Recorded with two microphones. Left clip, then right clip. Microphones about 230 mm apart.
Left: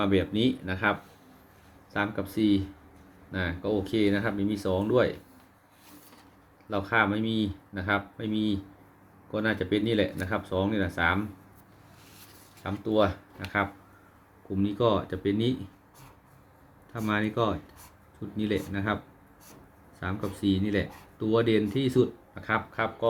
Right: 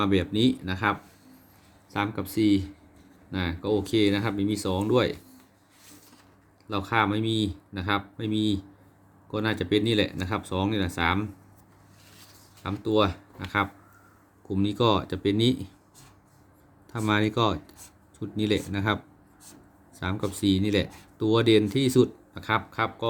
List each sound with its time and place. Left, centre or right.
0.0 s speech: right
6.7 s speech: right
12.6 s speech: right
14.5 s speech: right
17.1 s speech: right
20.0 s speech: right